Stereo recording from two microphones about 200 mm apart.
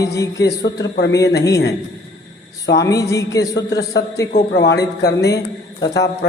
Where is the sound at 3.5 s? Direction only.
55° left (ahead or behind).